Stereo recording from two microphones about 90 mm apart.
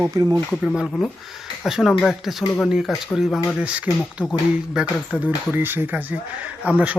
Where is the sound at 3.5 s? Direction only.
15° right (ahead or behind).